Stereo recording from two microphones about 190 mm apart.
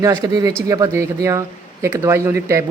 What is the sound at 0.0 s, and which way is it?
Speech, 15° right (ahead or behind).